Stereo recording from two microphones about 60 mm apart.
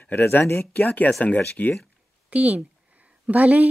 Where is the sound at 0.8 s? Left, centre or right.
Left.